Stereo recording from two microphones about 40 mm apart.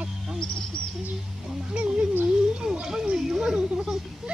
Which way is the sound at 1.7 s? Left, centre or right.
Right.